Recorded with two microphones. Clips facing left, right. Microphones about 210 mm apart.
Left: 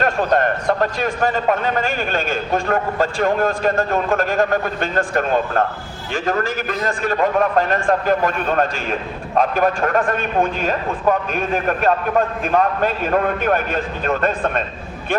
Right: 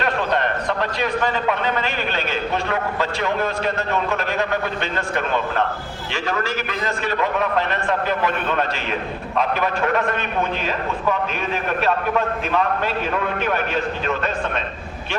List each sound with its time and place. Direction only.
0.0 s a man's voice: 45° left (ahead or behind)